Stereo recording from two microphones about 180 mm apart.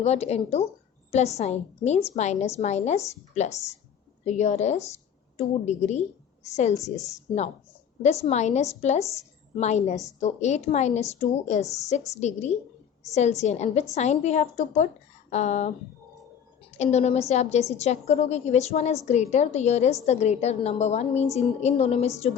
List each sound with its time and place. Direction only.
0.0 s a woman's voice: 35° left (ahead or behind)
8.0 s a woman's voice: 40° left (ahead or behind)
16.7 s a woman's voice: 40° left (ahead or behind)